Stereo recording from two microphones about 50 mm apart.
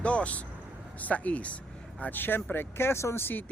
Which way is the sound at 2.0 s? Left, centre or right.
Left.